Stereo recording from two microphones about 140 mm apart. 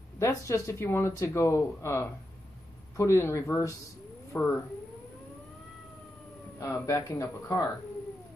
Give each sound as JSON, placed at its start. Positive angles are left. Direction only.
{"t": 0.2, "sound": "speech", "side_deg": 20}
{"t": 6.6, "sound": "speech", "side_deg": 20}